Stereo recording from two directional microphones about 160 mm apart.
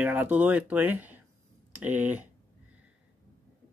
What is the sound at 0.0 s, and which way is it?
Speech, 10° right (ahead or behind).